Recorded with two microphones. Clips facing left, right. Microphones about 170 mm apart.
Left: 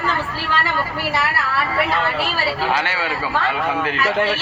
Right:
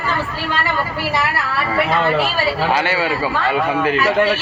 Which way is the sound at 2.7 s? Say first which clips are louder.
Right 4 dB; 10° right (ahead or behind).